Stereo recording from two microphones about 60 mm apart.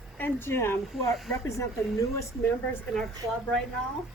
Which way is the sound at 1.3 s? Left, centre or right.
Left.